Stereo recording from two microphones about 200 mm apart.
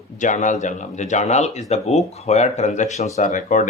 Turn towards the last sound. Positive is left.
turn(degrees=40)  # may be behind; listen again after turning